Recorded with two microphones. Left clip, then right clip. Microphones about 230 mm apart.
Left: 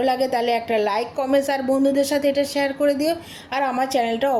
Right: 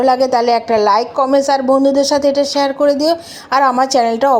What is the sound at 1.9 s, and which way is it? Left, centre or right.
A woman's voice, centre.